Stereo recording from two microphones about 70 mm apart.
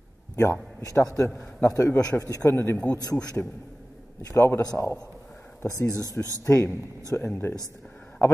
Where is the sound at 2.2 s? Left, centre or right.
Left.